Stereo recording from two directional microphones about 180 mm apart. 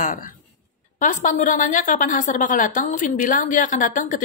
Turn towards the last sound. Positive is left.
turn(degrees=45)  # may be behind; listen again after turning